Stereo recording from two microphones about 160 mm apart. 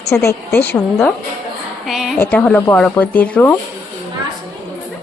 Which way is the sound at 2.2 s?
10° left (ahead or behind).